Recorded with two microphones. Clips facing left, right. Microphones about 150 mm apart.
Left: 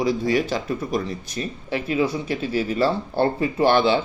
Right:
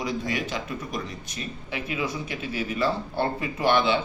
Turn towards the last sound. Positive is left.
turn(degrees=30)  # may be behind; listen again after turning